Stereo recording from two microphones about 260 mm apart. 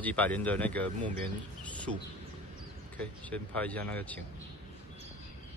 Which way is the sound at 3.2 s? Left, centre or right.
Centre.